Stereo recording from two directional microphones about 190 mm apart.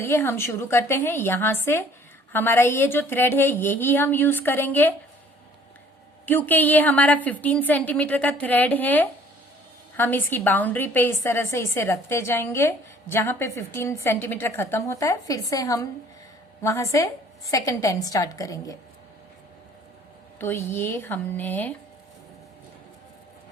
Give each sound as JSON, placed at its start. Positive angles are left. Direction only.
{"t": 0.0, "sound": "a woman's voice", "side_deg": 15}
{"t": 6.2, "sound": "a woman's voice", "side_deg": 10}
{"t": 20.4, "sound": "a woman's voice", "side_deg": 10}